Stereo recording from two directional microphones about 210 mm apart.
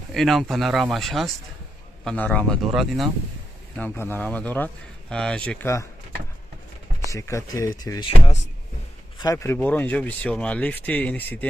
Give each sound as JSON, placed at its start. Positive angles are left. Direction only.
{"t": 0.1, "sound": "speech", "side_deg": 0}
{"t": 3.7, "sound": "speech", "side_deg": 10}
{"t": 7.1, "sound": "speech", "side_deg": 15}
{"t": 9.2, "sound": "speech", "side_deg": 15}